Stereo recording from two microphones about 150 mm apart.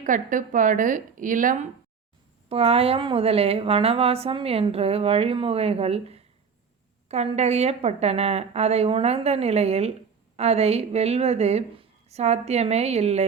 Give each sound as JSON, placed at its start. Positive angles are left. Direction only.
{"t": 0.0, "sound": "a woman's voice", "side_deg": -60}
{"t": 2.5, "sound": "a woman's voice", "side_deg": -40}